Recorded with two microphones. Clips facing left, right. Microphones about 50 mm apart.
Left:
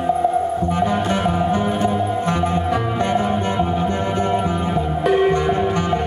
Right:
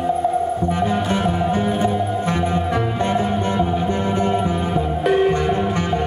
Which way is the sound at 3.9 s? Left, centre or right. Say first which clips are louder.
Even; left.